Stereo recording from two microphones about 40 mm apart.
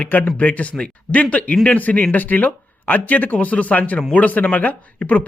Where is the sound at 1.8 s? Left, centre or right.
Left.